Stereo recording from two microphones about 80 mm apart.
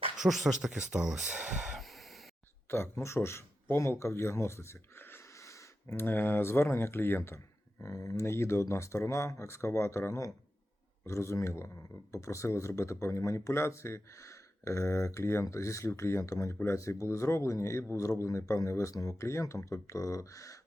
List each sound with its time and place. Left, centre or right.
0.2 s speech: centre
2.6 s speech: left